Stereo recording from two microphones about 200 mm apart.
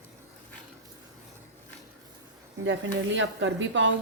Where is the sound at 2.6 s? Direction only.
65° right (ahead or behind).